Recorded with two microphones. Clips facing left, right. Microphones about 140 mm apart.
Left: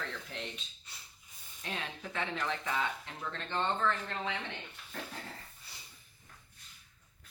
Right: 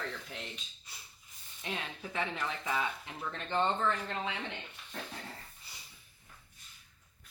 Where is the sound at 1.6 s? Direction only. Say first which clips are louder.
Right 1 dB; 10° right (ahead or behind).